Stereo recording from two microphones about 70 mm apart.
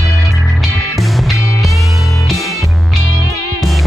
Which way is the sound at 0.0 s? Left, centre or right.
Centre.